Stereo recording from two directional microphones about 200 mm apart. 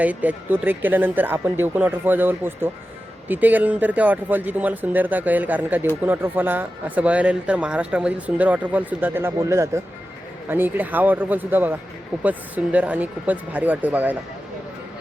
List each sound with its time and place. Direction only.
0.0 s speech: 10° right (ahead or behind)